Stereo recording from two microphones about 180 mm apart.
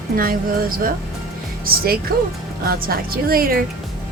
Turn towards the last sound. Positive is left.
turn(degrees=-55)  # may be behind; listen again after turning